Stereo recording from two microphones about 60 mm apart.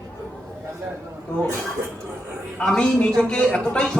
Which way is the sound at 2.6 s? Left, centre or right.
Centre.